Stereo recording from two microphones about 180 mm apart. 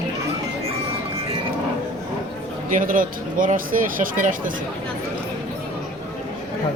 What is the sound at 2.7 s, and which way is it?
Speech, 50° right (ahead or behind).